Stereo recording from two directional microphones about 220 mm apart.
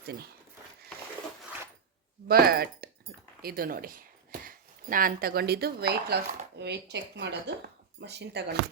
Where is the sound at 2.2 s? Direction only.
45° right (ahead or behind).